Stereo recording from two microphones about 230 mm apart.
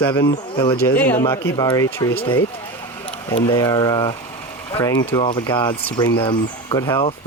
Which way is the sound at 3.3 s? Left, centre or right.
Left.